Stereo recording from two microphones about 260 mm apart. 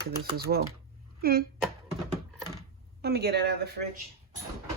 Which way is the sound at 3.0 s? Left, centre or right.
Right.